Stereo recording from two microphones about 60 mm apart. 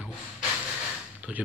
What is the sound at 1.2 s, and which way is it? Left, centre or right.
Speech, right.